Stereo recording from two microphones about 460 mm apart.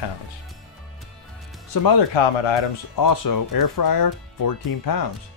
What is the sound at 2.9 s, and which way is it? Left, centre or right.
Speech, left.